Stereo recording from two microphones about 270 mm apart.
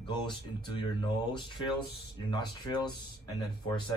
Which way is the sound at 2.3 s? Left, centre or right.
Centre.